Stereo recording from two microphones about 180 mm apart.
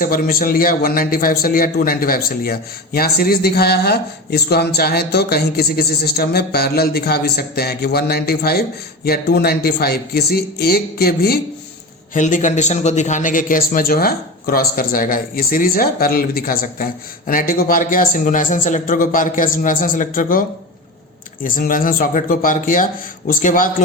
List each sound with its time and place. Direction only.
0.0 s a man's voice: 55° left (ahead or behind)
12.1 s a man's voice: 45° left (ahead or behind)
21.4 s a man's voice: 50° left (ahead or behind)